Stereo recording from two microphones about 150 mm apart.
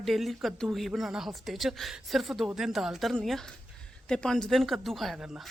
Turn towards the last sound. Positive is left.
turn(degrees=-5)  # may be behind; listen again after turning